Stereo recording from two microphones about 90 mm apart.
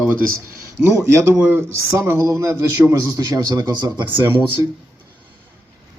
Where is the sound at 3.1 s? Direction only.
50° right (ahead or behind).